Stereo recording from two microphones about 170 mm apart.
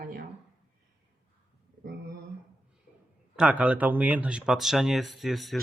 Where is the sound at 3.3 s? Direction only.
5° right (ahead or behind).